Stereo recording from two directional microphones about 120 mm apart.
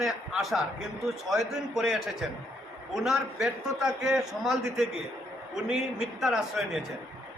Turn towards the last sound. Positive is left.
turn(degrees=0)  # may be behind; listen again after turning